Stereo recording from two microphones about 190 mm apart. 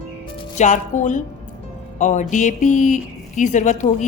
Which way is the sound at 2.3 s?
40° left (ahead or behind).